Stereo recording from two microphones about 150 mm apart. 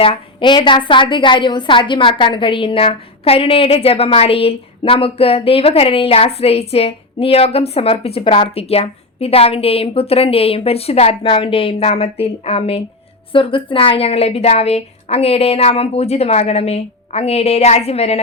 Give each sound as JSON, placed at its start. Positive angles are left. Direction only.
{"t": 0.0, "sound": "a woman's voice", "side_deg": 35}